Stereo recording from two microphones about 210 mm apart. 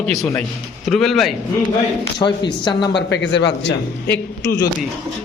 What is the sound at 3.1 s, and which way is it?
Speech, 55° left (ahead or behind).